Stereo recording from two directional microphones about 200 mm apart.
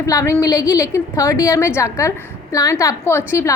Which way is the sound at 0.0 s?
15° left (ahead or behind).